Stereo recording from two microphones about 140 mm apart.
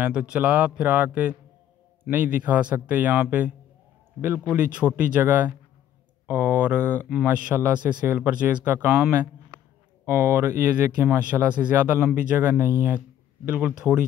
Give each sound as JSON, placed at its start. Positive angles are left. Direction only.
{"t": 0.0, "sound": "speech", "side_deg": -10}
{"t": 10.0, "sound": "speech", "side_deg": -20}